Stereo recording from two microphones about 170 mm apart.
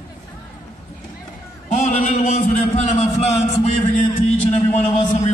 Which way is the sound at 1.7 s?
45° left (ahead or behind).